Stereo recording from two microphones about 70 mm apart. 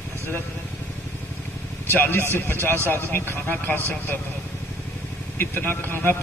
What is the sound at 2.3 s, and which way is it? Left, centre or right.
A man's voice, left.